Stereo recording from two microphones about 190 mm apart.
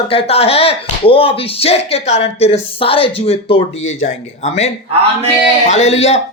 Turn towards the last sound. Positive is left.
turn(degrees=35)  # may be behind; listen again after turning